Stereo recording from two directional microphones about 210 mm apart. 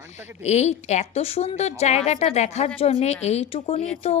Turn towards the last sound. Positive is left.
turn(degrees=25)  # may be behind; listen again after turning